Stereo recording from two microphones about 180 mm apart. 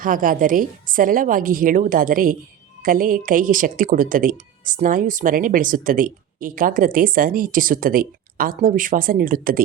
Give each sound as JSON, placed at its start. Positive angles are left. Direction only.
{"t": 0.0, "sound": "speech", "side_deg": -50}